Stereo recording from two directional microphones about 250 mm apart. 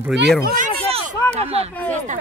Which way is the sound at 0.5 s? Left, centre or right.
Right.